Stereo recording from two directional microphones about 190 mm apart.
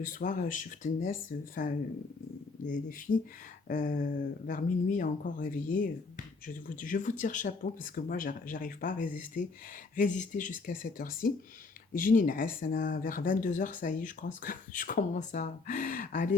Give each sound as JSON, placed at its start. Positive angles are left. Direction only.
{"t": 0.0, "sound": "speech", "side_deg": 45}